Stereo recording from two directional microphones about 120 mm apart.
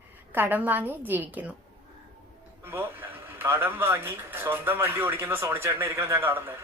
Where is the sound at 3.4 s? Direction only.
20° right (ahead or behind).